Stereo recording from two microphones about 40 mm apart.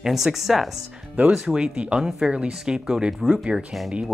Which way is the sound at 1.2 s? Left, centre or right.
Centre.